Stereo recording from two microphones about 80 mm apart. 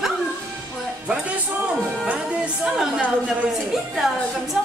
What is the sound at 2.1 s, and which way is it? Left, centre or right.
Speech, centre.